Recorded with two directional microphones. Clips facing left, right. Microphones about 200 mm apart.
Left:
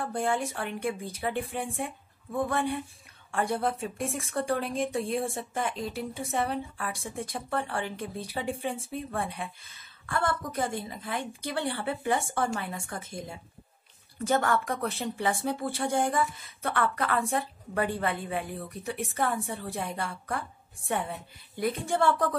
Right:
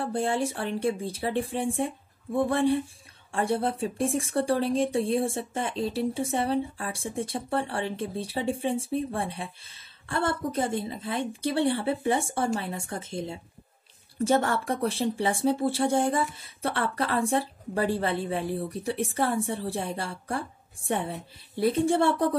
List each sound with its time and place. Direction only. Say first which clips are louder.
0.0 s speech: right 2 dB; 30° right (ahead or behind)